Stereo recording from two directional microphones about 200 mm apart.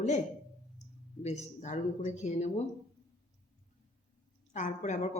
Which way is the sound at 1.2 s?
35° left (ahead or behind).